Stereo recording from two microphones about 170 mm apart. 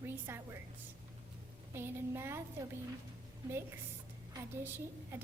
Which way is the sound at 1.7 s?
15° right (ahead or behind).